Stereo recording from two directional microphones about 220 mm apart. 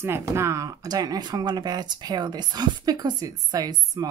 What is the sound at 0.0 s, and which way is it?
Speech, 10° right (ahead or behind).